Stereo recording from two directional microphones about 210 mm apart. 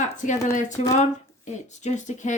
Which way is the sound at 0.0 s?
35° left (ahead or behind).